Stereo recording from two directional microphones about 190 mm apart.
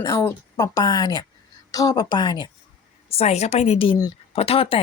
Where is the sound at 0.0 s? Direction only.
15° left (ahead or behind).